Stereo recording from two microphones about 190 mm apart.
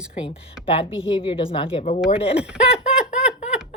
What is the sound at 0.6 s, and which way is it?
Speech, 30° left (ahead or behind).